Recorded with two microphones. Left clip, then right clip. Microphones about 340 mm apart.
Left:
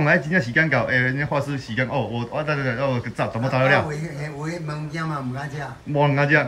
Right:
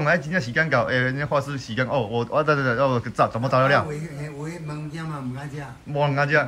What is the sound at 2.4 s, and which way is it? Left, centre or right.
Speech, right.